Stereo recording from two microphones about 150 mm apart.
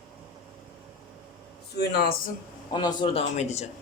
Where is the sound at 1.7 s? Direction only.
90° left.